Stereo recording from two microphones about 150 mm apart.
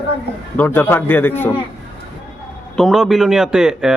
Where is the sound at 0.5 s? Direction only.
10° left (ahead or behind).